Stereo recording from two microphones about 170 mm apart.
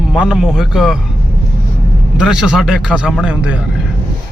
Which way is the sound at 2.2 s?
5° right (ahead or behind).